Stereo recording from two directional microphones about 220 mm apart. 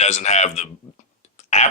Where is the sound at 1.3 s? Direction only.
30° left (ahead or behind).